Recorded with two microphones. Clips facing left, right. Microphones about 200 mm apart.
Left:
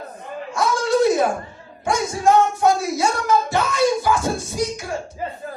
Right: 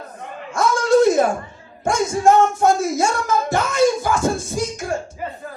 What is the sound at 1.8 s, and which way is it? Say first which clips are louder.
Speech: right 3 dB; 45° right (ahead or behind).